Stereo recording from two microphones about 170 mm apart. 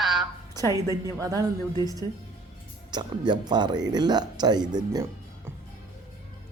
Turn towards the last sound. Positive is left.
turn(degrees=-25)  # may be behind; listen again after turning